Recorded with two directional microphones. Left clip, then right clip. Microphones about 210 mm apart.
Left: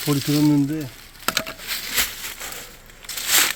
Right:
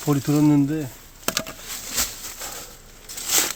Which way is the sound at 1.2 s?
40° right (ahead or behind).